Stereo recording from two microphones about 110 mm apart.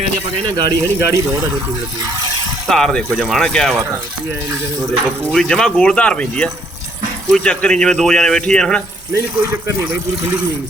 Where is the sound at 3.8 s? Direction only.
25° right (ahead or behind).